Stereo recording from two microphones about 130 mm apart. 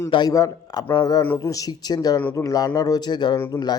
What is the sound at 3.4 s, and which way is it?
Speech, 20° left (ahead or behind).